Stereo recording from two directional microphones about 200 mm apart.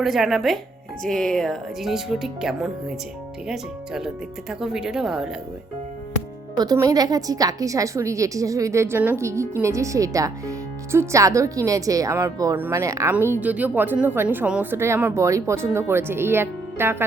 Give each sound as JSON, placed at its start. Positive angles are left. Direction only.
{"t": 0.0, "sound": "speech", "side_deg": 0}
{"t": 6.6, "sound": "a woman's voice", "side_deg": -20}